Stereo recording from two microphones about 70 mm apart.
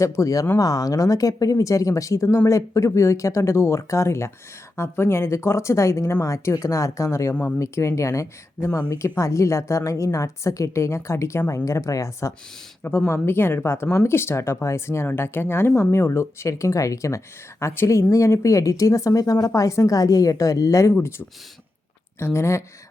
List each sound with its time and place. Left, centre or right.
0.0 s a woman's voice: left
0.6 s a woman's voice: left
13.1 s a woman's voice: left
22.2 s speech: left